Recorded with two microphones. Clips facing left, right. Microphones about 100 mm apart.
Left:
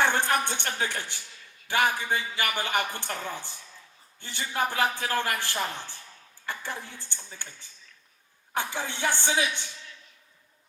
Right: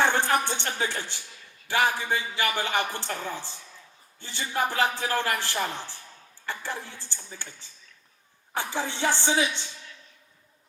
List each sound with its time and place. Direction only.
0.0 s music: 20° right (ahead or behind)
0.6 s a man's voice: 20° right (ahead or behind)
7.0 s a man's voice: 20° right (ahead or behind)
8.5 s a man's voice: 20° right (ahead or behind)